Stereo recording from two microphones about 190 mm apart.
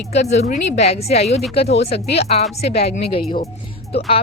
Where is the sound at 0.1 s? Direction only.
35° left (ahead or behind).